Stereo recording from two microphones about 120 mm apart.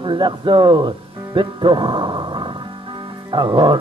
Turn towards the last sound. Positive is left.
turn(degrees=-40)  # may be behind; listen again after turning